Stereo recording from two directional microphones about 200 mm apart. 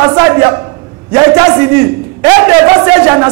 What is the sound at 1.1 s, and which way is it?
A man's voice, 15° right (ahead or behind).